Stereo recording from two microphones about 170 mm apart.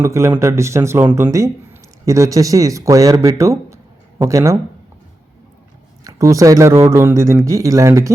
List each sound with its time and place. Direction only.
0.0 s speech: 15° right (ahead or behind)
6.1 s speech: 20° right (ahead or behind)